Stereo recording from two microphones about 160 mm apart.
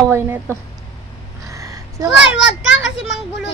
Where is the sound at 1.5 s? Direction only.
20° right (ahead or behind).